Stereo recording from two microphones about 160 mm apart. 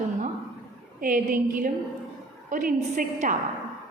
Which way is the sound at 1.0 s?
60° right (ahead or behind).